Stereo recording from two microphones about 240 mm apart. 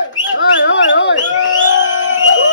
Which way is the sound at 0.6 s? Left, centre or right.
Left.